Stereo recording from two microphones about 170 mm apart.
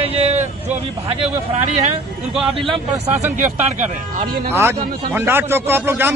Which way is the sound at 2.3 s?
Centre (ahead or behind).